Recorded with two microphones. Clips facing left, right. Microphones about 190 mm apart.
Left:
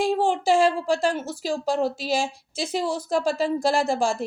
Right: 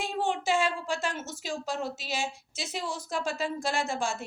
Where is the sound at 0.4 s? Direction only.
35° left (ahead or behind).